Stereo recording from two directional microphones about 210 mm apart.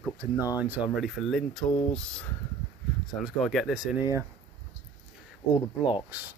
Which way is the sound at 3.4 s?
Centre (ahead or behind).